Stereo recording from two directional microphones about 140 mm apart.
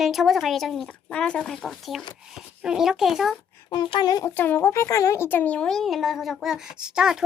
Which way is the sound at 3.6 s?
35° left (ahead or behind).